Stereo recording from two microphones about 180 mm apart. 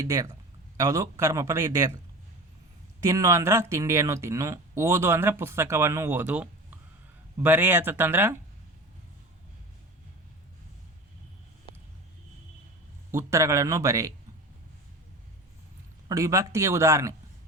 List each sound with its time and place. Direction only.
0.0 s a man's voice: 15° right (ahead or behind)
3.0 s speech: 20° right (ahead or behind)
13.1 s speech: 15° right (ahead or behind)
16.0 s speech: 15° right (ahead or behind)